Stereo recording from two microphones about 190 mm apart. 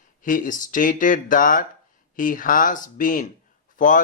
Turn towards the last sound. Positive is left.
turn(degrees=45)  # may be behind; listen again after turning